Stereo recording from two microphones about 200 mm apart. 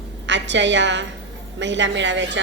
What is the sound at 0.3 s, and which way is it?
A woman's voice, 65° right (ahead or behind).